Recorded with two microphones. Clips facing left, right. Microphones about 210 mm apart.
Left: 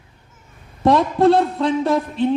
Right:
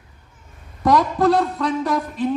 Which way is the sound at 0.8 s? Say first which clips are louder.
Left 2 dB; 25° left (ahead or behind).